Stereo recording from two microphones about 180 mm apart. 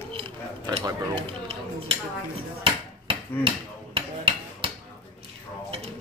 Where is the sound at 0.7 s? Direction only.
30° right (ahead or behind).